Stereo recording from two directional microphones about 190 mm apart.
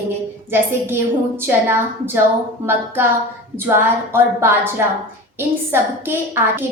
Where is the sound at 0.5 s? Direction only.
10° right (ahead or behind).